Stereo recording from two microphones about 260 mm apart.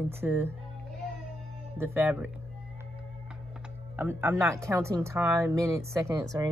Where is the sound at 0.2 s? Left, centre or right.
Centre.